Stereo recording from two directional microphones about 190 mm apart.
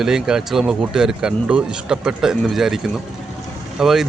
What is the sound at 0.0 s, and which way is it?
Speech, 5° right (ahead or behind).